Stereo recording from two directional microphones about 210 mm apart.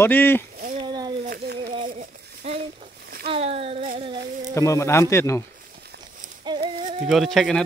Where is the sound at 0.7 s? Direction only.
20° right (ahead or behind).